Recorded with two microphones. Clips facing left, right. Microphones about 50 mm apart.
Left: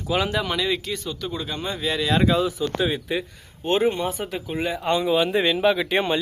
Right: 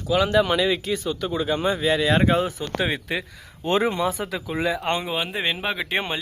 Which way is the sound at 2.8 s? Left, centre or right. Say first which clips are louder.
Right 2 dB; right.